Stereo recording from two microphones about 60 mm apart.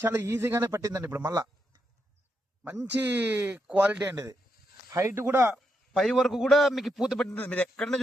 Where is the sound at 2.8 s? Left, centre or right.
Right.